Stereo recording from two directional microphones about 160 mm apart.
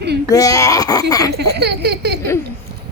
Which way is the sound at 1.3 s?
90° right.